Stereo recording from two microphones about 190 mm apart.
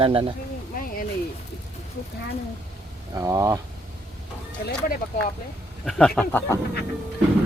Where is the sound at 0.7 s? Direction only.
50° left (ahead or behind).